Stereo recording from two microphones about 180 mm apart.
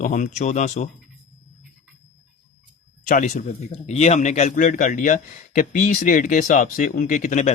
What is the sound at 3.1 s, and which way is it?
A man's voice, 45° left (ahead or behind).